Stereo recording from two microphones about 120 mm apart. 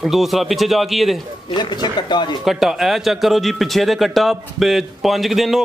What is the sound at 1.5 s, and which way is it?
Speech, 40° left (ahead or behind).